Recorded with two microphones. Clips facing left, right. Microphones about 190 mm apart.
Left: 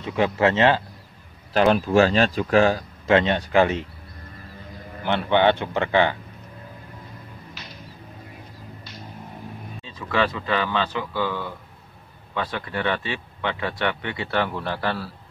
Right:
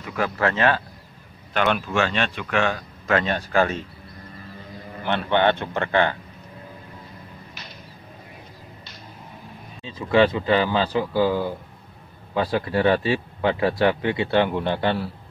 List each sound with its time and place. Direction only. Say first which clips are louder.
0.0 s speech: left 3 dB; 25° left (ahead or behind)
1.5 s speech: left 5 dB; 35° left (ahead or behind); by 3.8 s 20° left (ahead or behind)
5.0 s speech: left 1 dB; 15° left (ahead or behind)
9.8 s speech: right 6 dB; 30° right (ahead or behind)